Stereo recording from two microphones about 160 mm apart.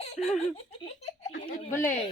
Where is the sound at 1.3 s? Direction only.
60° left (ahead or behind).